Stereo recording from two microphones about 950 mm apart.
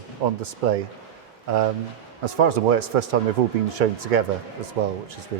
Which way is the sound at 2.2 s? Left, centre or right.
Right.